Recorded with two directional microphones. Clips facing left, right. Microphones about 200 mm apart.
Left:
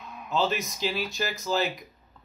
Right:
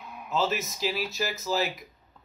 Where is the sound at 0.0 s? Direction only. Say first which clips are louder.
Left 1 dB; 10° right (ahead or behind).